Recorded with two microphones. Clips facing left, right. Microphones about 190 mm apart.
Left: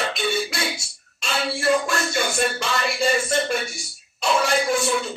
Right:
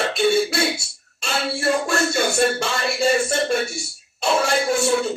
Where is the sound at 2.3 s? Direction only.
30° right (ahead or behind).